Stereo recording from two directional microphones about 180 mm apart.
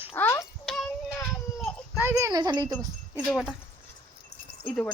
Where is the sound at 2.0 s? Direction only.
15° right (ahead or behind).